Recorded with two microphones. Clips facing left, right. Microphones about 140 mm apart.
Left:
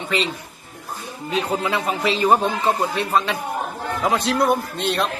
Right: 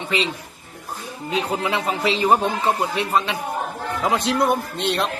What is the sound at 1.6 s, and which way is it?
Speech, 25° right (ahead or behind).